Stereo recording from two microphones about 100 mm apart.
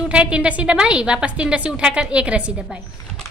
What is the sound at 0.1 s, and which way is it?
A woman's voice, 10° right (ahead or behind).